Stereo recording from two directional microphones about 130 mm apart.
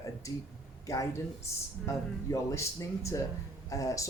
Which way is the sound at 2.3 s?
25° left (ahead or behind).